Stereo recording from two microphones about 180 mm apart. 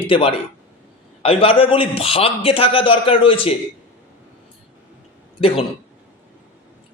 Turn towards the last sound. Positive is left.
turn(degrees=30)  # may be behind; listen again after turning